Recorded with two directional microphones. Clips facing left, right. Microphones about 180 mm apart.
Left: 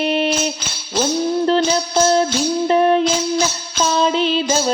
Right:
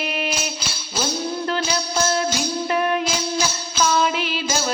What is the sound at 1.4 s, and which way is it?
Music, 30° left (ahead or behind).